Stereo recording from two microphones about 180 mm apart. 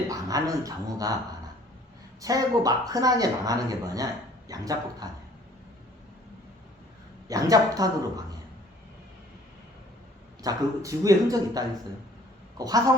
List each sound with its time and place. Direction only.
0.1 s speech: 20° right (ahead or behind)
2.2 s speech: 20° right (ahead or behind)
7.3 s speech: 20° right (ahead or behind)
10.4 s speech: 20° right (ahead or behind)